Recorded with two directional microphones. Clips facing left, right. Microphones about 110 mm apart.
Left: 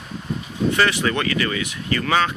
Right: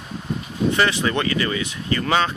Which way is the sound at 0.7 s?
25° right (ahead or behind).